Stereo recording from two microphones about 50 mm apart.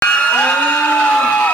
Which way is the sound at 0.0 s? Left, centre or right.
Left.